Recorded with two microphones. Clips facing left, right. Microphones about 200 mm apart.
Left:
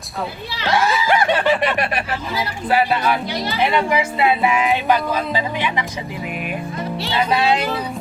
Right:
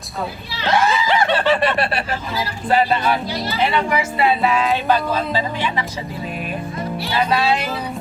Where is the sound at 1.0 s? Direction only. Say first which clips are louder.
Even; 10° left (ahead or behind).